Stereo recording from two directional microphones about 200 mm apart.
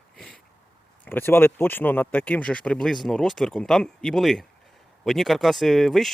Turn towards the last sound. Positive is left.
turn(degrees=0)  # may be behind; listen again after turning